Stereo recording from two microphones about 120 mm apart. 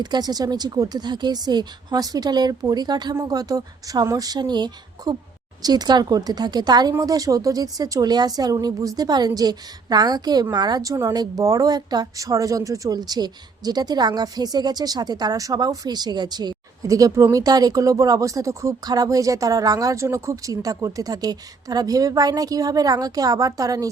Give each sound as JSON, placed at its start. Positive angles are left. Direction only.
{"t": 0.0, "sound": "speech", "side_deg": -35}